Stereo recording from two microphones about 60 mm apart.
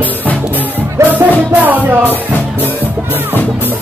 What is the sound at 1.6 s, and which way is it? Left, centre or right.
Music, right.